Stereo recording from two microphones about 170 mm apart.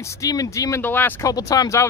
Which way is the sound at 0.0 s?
20° left (ahead or behind).